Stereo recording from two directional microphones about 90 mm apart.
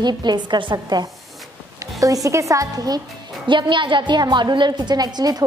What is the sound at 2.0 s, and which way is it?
A woman's voice, 40° right (ahead or behind).